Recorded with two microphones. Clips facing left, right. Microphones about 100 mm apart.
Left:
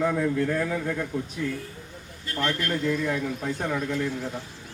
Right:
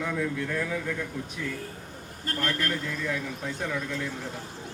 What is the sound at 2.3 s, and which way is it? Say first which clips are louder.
Speech: left 1 dB; 45° right (ahead or behind).